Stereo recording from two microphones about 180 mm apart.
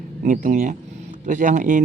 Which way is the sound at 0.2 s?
45° right (ahead or behind).